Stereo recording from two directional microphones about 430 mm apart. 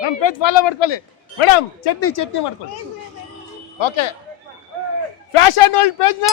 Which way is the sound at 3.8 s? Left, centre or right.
Left.